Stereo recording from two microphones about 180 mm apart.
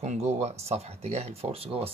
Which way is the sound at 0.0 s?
40° right (ahead or behind).